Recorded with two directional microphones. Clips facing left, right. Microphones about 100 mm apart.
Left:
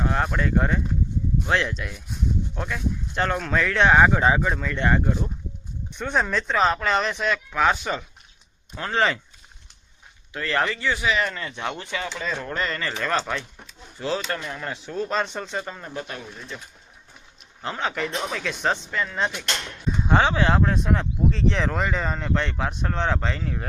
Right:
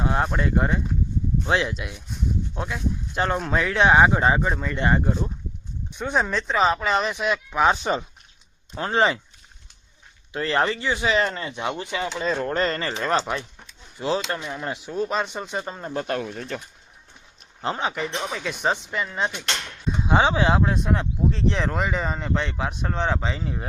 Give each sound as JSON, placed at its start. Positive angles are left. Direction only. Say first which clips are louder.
{"t": 0.0, "sound": "a sound", "louder": "right 1 dB", "side_deg": -10}
{"t": 0.3, "sound": "speech", "louder": "even", "side_deg": -5}
{"t": 10.3, "sound": "speech", "louder": "right 2 dB", "side_deg": -30}
{"t": 12.4, "sound": "speech", "louder": "right 4 dB", "side_deg": -40}
{"t": 12.9, "sound": "speech", "louder": "right 2 dB", "side_deg": -25}
{"t": 15.5, "sound": "speech", "louder": "right 3 dB", "side_deg": -25}
{"t": 16.0, "sound": "speech", "louder": "right 9 dB", "side_deg": -55}
{"t": 16.2, "sound": "speech", "louder": "right 6 dB", "side_deg": -75}
{"t": 17.9, "sound": "speech", "louder": "left 1 dB", "side_deg": -10}
{"t": 19.9, "sound": "a sound", "louder": "even", "side_deg": -5}
{"t": 20.2, "sound": "speech", "louder": "right 1 dB", "side_deg": -15}